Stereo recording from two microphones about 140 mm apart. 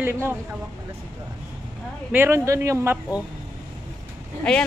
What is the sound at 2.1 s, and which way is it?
Speech, 15° right (ahead or behind).